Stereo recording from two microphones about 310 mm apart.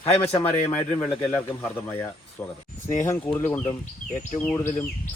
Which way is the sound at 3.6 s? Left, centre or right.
Left.